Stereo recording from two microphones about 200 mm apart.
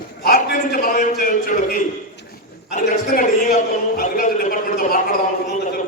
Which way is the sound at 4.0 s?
45° left (ahead or behind).